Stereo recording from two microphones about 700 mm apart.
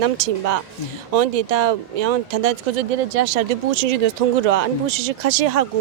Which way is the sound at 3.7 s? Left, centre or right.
Right.